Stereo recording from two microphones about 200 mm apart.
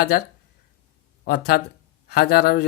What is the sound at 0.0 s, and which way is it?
A man's voice, 50° left (ahead or behind).